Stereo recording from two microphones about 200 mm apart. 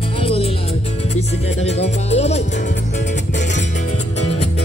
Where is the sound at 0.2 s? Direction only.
30° left (ahead or behind).